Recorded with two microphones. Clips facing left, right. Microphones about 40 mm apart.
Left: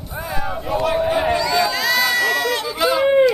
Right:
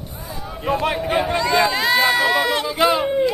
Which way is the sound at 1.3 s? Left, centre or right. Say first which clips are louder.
Right 1 dB; right.